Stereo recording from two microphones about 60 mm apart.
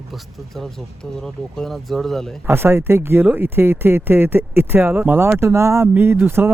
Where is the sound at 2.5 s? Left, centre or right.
Right.